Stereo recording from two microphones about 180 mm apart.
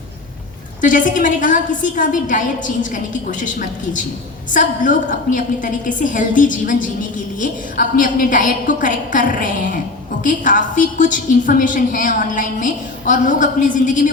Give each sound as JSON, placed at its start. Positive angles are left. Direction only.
{"t": 0.8, "sound": "a woman's voice", "side_deg": 45}